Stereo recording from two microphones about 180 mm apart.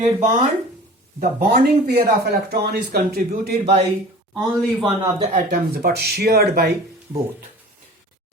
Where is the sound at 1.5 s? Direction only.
55° right (ahead or behind).